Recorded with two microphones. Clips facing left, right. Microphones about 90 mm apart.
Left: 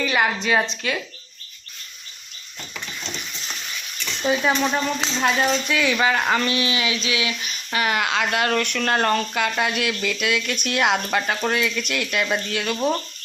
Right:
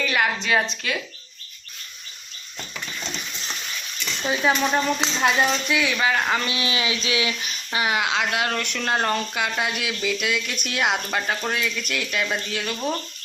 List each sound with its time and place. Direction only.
0.0 s a woman's voice: 10° left (ahead or behind)
4.3 s speech: centre (ahead or behind)
6.4 s speech: 25° right (ahead or behind)
7.7 s speech: 15° right (ahead or behind); by 12.7 s centre (ahead or behind)
12.7 s speech: 15° left (ahead or behind)